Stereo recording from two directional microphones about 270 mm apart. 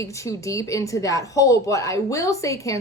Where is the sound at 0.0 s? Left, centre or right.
Centre.